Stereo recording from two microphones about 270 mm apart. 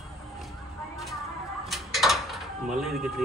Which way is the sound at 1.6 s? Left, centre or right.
Centre.